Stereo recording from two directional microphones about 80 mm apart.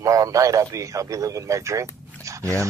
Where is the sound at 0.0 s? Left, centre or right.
Right.